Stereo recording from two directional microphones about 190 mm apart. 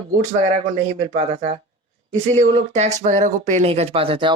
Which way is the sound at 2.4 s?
35° right (ahead or behind).